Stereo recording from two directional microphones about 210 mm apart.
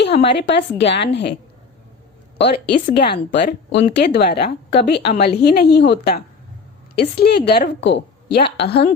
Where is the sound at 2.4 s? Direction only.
50° left (ahead or behind).